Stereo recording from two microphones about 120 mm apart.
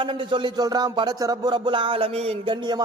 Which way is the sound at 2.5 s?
40° right (ahead or behind).